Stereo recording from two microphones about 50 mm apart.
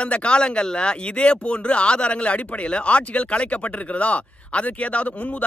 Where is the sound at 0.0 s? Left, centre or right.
Left.